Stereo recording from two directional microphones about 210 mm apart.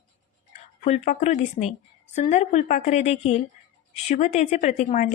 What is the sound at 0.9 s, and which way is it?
A woman's voice, 30° left (ahead or behind).